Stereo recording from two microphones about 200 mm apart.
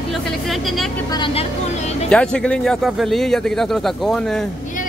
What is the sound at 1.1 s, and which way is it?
Speech, 25° left (ahead or behind).